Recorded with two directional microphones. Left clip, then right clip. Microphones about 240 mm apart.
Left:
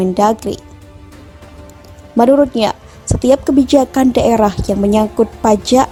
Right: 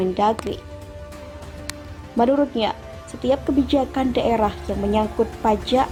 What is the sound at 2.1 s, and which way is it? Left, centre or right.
A woman's voice, left.